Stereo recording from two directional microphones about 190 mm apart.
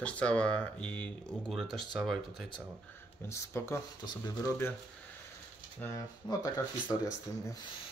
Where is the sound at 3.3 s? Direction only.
15° left (ahead or behind).